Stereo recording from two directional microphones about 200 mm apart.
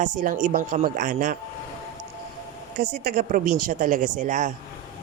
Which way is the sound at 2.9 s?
40° right (ahead or behind).